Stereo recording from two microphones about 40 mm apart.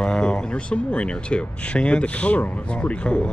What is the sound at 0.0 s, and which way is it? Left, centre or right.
Speech, left.